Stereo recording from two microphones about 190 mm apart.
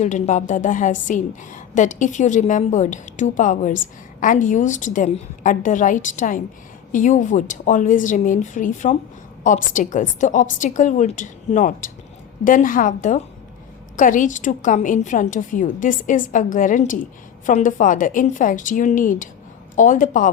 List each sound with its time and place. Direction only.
0.0 s a woman's voice: 40° left (ahead or behind)